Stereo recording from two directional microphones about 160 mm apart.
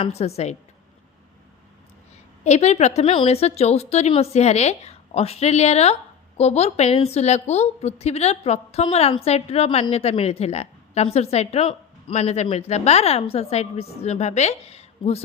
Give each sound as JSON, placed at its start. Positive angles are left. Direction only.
{"t": 0.0, "sound": "a woman's voice", "side_deg": 40}
{"t": 2.4, "sound": "a woman's voice", "side_deg": 45}